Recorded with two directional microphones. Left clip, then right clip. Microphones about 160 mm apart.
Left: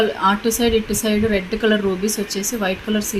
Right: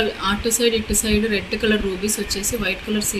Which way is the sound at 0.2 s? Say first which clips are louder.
Left 3 dB; 50° left (ahead or behind).